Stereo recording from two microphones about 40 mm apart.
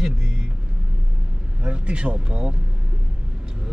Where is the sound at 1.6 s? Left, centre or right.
Right.